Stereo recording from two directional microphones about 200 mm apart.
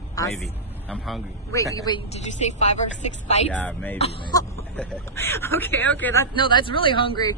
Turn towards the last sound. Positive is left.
turn(degrees=20)  # may be behind; listen again after turning